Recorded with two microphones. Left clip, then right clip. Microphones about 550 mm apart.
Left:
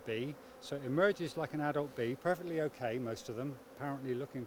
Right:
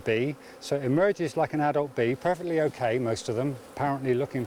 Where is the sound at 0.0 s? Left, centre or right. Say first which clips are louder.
Right 13 dB; right.